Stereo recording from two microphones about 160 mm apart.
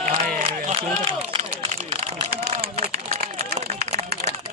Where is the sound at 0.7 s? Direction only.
35° right (ahead or behind).